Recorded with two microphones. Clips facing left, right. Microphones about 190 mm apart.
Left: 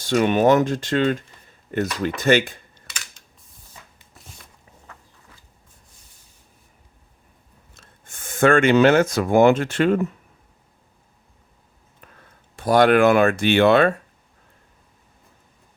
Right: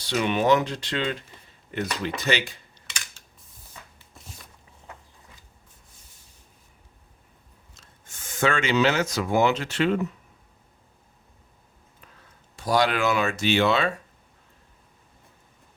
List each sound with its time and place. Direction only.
0.0 s speech: 50° left (ahead or behind)
7.8 s speech: 55° left (ahead or behind)
11.9 s speech: 55° left (ahead or behind)